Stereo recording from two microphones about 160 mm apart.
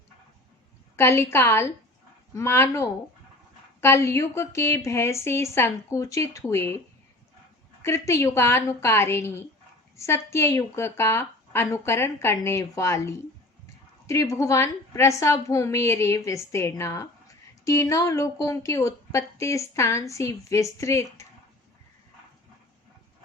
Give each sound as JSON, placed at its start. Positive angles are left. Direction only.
{"t": 0.9, "sound": "a woman's voice", "side_deg": 15}